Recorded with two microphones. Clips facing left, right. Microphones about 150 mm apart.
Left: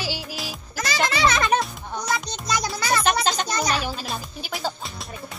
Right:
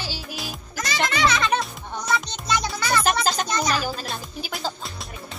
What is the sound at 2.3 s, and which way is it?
Music, 40° left (ahead or behind).